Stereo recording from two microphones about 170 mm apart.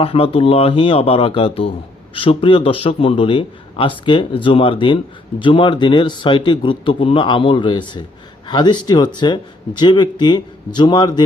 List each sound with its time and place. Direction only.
0.0 s a man's voice: 35° left (ahead or behind)